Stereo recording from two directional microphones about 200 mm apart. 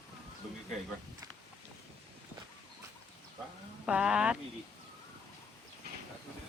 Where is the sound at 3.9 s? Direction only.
5° right (ahead or behind).